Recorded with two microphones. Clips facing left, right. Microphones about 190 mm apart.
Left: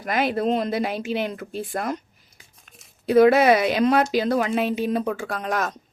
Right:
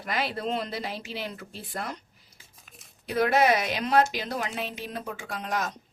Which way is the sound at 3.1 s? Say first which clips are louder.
Left 8 dB; 55° left (ahead or behind).